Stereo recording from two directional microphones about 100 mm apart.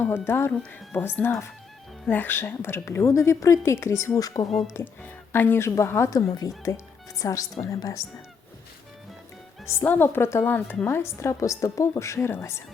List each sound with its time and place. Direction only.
0.0 s a woman's voice: 25° left (ahead or behind)
4.7 s a woman's voice: 20° left (ahead or behind)
9.6 s a woman's voice: 20° left (ahead or behind)